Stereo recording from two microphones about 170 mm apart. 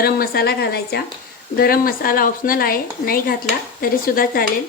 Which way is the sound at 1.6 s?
60° left (ahead or behind).